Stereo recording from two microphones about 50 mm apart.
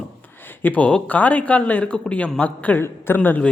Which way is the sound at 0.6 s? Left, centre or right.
Left.